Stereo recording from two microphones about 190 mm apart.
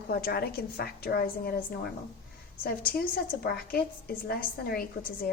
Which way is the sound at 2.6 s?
50° left (ahead or behind).